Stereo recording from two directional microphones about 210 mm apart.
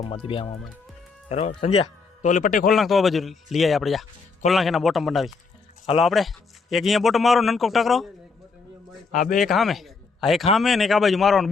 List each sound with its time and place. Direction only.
0.0 s speech: 25° left (ahead or behind)
2.3 s a man's voice: 40° left (ahead or behind)
2.6 s a man's voice: centre (ahead or behind)
9.3 s a man's voice: centre (ahead or behind)